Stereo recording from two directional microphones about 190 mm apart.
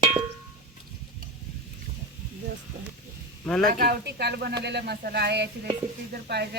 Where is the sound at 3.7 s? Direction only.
55° right (ahead or behind).